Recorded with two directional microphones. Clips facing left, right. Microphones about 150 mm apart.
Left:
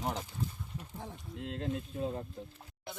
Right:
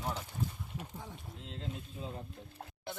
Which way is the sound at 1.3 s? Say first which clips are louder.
Left 8 dB; 65° left (ahead or behind).